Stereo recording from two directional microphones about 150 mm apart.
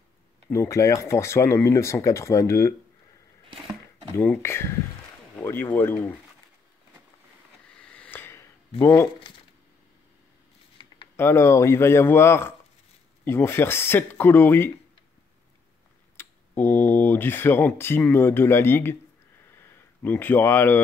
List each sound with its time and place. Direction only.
0.5 s speech: 20° left (ahead or behind)
4.1 s speech: 15° left (ahead or behind)
7.7 s sniff: 10° left (ahead or behind)
8.8 s speech: 15° left (ahead or behind)
11.1 s speech: 15° left (ahead or behind)
16.2 s speech: 10° left (ahead or behind)
19.5 s a sound: 15° left (ahead or behind)